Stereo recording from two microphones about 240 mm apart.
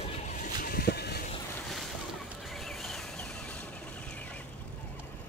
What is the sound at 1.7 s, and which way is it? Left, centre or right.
Boat, centre.